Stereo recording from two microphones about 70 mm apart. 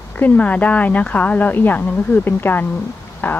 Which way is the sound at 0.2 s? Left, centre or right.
Left.